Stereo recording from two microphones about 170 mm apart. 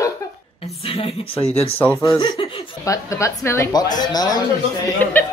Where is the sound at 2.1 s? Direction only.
30° left (ahead or behind).